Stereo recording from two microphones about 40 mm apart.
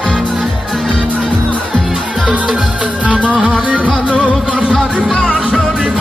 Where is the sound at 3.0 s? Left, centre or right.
Right.